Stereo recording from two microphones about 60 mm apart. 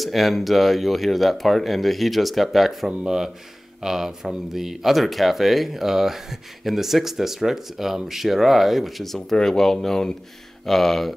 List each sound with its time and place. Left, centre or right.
0.0 s speech: centre